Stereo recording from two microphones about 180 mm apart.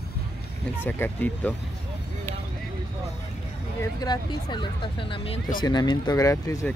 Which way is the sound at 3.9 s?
25° left (ahead or behind).